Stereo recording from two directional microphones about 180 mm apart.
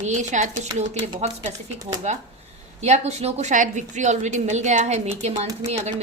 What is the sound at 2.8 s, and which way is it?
A woman's voice, 35° right (ahead or behind).